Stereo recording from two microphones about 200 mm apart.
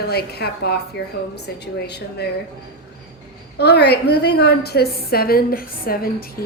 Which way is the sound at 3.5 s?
55° left (ahead or behind).